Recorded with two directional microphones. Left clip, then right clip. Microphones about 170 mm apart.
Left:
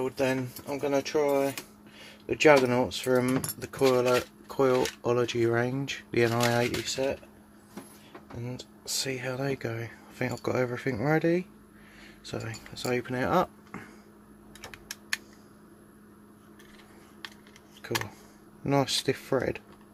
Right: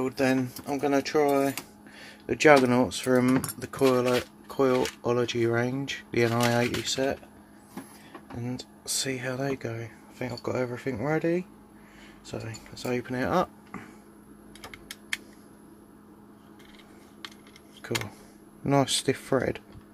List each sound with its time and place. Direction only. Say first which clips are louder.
0.0 s speech: right 2 dB; 20° right (ahead or behind)
8.8 s speech: right 1 dB; 15° right (ahead or behind)
17.8 s a sound: even; 15° right (ahead or behind)
18.6 s speech: right 2 dB; 15° right (ahead or behind)